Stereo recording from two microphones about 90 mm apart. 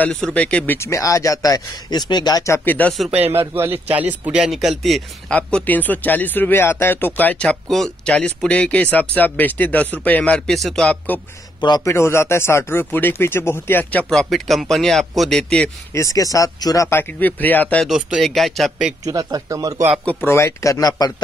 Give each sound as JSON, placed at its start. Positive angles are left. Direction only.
{"t": 0.0, "sound": "speech", "side_deg": 10}
{"t": 0.7, "sound": "speech", "side_deg": 35}
{"t": 2.4, "sound": "speech", "side_deg": 25}
{"t": 3.3, "sound": "a man's voice", "side_deg": -30}
{"t": 5.3, "sound": "speech", "side_deg": 15}
{"t": 7.4, "sound": "speech", "side_deg": 0}
{"t": 11.8, "sound": "speech", "side_deg": 30}
{"t": 14.1, "sound": "a man's voice", "side_deg": 5}
{"t": 15.9, "sound": "speech", "side_deg": 35}
{"t": 16.9, "sound": "speech", "side_deg": 20}
{"t": 17.8, "sound": "a man's voice", "side_deg": -5}
{"t": 19.0, "sound": "speech", "side_deg": -40}
{"t": 20.2, "sound": "speech", "side_deg": 30}